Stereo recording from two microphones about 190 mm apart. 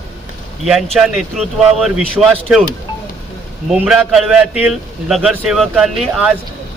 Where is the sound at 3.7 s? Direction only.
Centre (ahead or behind).